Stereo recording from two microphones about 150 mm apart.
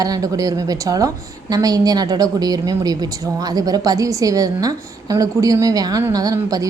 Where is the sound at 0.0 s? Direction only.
25° right (ahead or behind).